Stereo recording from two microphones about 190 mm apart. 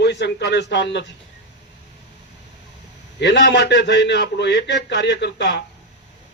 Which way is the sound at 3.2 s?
65° left (ahead or behind).